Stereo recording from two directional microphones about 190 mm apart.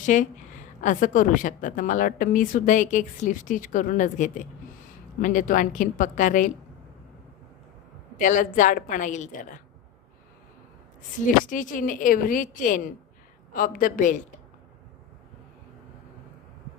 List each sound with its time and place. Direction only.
0.0 s a woman's voice: 40° left (ahead or behind)
8.1 s a woman's voice: 40° left (ahead or behind)
11.4 s a woman's voice: 45° left (ahead or behind)